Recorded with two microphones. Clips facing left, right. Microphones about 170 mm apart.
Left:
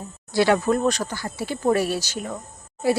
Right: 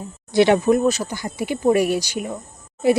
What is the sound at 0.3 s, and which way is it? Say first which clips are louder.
Speech: right 4 dB; 20° right (ahead or behind).